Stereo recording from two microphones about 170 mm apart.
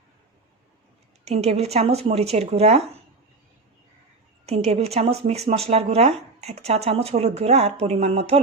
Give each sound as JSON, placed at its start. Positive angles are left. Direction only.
{"t": 1.2, "sound": "speech", "side_deg": -40}
{"t": 4.4, "sound": "speech", "side_deg": -40}